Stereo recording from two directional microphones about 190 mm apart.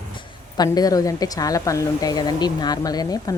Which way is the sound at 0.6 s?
20° left (ahead or behind).